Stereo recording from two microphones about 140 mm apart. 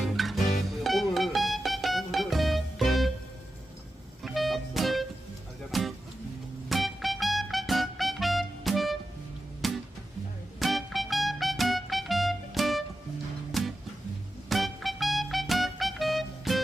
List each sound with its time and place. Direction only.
0.1 s music: centre (ahead or behind)
4.2 s music: centre (ahead or behind)